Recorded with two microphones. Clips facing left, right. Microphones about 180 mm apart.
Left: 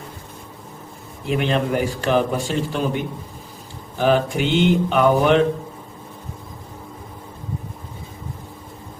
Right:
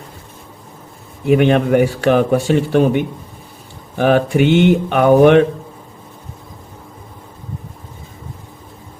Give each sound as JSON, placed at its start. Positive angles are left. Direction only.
{"t": 1.2, "sound": "speech", "side_deg": -60}